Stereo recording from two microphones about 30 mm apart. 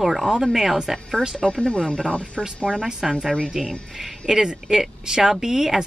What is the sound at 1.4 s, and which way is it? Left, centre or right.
Speech, left.